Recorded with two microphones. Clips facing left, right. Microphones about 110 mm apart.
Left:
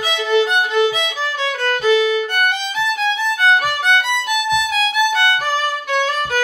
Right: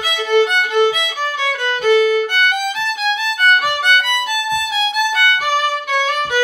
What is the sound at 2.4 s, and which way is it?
Music, 5° right (ahead or behind).